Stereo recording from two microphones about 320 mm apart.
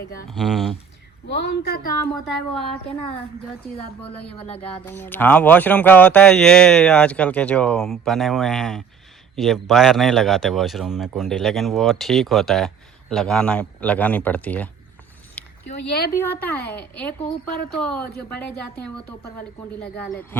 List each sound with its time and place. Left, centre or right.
0.3 s speech: centre
1.4 s a woman's voice: left
4.4 s music: centre
4.6 s speech: centre
15.8 s a woman's voice: left
16.1 s speech: centre